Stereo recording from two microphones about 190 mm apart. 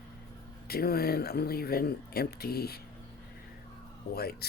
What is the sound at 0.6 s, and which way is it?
Speech, 55° left (ahead or behind).